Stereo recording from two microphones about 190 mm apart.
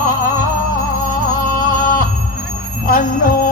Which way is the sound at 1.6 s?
45° left (ahead or behind).